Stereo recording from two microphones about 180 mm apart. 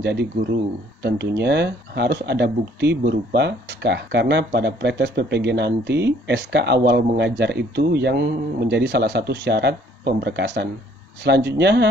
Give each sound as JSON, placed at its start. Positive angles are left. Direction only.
{"t": 0.0, "sound": "speech", "side_deg": -70}